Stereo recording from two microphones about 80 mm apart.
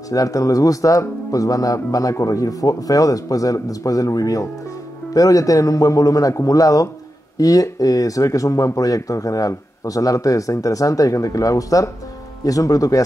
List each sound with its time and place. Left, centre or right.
0.1 s speech: left